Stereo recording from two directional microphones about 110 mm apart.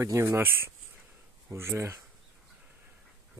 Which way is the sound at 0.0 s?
25° right (ahead or behind).